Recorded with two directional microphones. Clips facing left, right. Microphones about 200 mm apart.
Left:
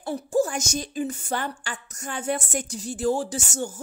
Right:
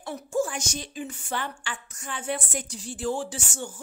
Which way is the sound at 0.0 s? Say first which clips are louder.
Left 4 dB; 35° left (ahead or behind).